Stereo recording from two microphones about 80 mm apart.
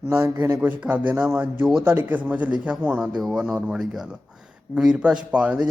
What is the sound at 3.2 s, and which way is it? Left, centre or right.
A man's voice, centre.